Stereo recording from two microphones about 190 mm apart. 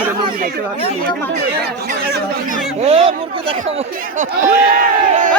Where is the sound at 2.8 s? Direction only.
30° right (ahead or behind).